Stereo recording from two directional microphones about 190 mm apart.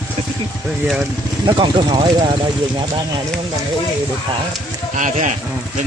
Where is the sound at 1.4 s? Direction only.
25° right (ahead or behind).